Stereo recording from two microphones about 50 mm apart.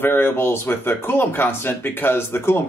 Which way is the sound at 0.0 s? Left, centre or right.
Left.